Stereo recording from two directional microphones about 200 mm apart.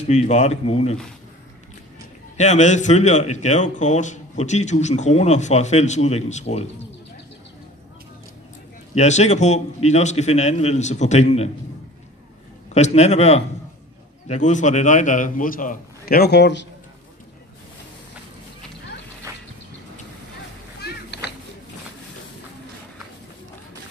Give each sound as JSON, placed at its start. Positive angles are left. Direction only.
{"t": 0.1, "sound": "a man's voice", "side_deg": 35}
{"t": 2.3, "sound": "a man's voice", "side_deg": 35}
{"t": 8.9, "sound": "a man's voice", "side_deg": 35}
{"t": 12.7, "sound": "a man's voice", "side_deg": 35}
{"t": 19.3, "sound": "a sound", "side_deg": -15}
{"t": 20.8, "sound": "a sound", "side_deg": 55}